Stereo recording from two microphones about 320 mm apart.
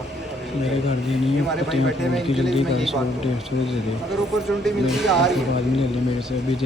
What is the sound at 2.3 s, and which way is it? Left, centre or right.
Speech, centre.